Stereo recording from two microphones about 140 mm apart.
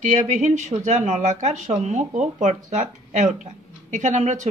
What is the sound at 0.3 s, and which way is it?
Speech, 60° right (ahead or behind).